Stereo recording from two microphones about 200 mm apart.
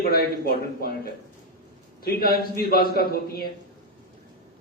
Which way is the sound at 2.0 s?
50° left (ahead or behind).